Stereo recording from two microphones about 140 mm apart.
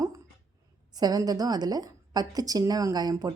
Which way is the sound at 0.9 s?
30° right (ahead or behind).